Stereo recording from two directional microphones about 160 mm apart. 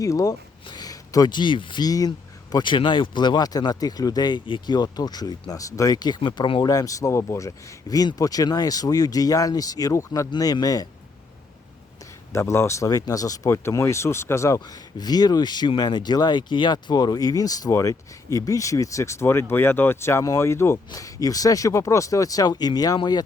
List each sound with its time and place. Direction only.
0.0 s speech: 20° left (ahead or behind)
12.3 s speech: 15° left (ahead or behind)